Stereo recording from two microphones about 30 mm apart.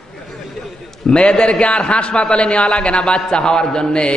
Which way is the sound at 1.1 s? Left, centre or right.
Left.